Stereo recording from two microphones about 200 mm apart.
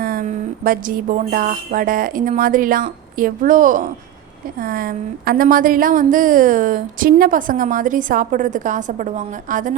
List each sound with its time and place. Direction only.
0.0 s a woman's voice: 45° right (ahead or behind)